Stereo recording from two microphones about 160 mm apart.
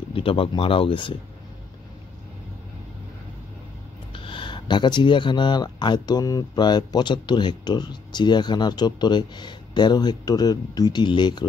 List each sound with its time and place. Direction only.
0.1 s speech: 35° left (ahead or behind)
4.1 s speech: 30° left (ahead or behind)